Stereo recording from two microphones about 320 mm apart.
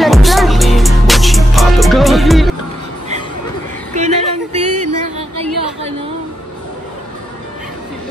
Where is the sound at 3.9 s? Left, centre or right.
Right.